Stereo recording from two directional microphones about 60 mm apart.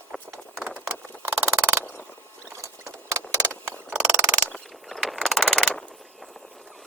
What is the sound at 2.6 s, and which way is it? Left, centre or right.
Vehicle, right.